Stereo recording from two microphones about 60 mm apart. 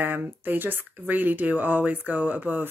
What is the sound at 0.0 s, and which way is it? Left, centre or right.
Speech, right.